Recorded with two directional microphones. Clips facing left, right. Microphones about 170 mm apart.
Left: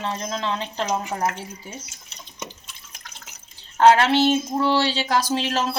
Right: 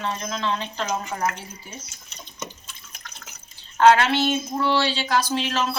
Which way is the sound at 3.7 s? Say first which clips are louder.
Left 1 dB; 30° left (ahead or behind).